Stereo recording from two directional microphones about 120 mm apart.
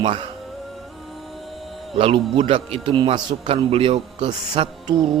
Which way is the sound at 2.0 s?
50° right (ahead or behind).